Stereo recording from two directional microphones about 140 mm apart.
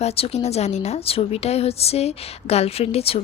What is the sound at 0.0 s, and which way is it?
A woman's voice, 45° left (ahead or behind).